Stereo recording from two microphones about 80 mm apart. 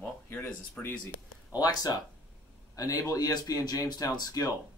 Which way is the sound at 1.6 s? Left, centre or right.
Left.